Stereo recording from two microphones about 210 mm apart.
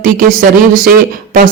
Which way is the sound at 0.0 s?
40° right (ahead or behind).